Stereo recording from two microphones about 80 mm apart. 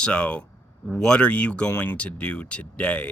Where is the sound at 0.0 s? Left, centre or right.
Centre.